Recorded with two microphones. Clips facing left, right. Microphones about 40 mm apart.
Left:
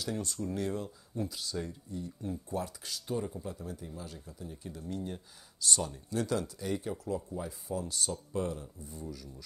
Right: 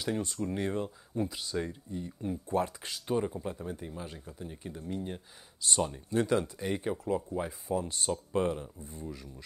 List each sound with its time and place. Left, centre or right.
0.0 s speech: right